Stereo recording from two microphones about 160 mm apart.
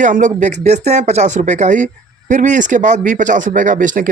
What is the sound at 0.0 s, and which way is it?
Speech, 50° right (ahead or behind).